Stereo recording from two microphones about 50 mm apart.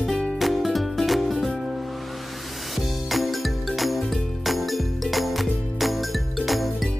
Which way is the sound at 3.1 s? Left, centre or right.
Centre.